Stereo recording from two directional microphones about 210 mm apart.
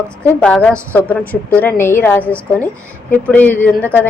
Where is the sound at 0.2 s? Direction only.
5° left (ahead or behind).